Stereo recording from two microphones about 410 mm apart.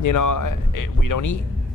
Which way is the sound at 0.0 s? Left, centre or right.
Left.